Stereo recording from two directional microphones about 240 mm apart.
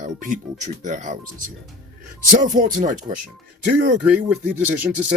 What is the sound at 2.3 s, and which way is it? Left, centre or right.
Speech, right.